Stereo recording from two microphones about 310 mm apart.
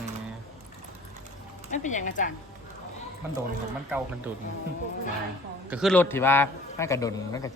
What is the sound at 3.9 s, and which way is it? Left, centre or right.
Speech, centre.